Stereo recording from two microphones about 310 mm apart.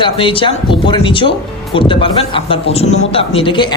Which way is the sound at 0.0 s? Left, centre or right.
Centre.